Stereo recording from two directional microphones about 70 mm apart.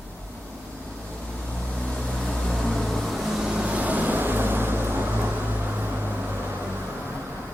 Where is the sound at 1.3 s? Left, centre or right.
Centre; by 6.8 s right.